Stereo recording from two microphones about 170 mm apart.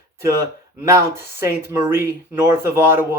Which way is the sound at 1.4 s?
15° right (ahead or behind).